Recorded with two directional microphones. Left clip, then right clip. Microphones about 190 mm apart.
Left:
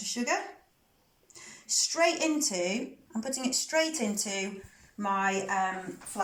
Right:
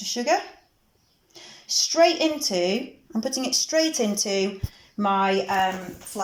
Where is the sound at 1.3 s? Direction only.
10° right (ahead or behind).